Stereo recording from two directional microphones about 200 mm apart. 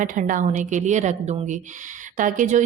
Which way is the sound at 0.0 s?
40° right (ahead or behind).